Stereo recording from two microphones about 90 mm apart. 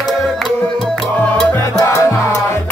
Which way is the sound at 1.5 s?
25° left (ahead or behind).